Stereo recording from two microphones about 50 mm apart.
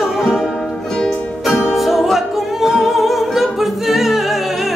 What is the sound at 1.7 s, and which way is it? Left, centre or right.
Music, centre.